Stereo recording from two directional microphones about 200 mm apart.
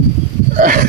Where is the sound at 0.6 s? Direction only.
40° right (ahead or behind).